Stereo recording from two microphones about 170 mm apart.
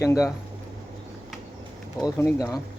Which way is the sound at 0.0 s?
20° left (ahead or behind).